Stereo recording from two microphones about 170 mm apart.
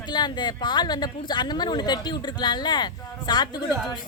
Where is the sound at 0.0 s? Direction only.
25° left (ahead or behind).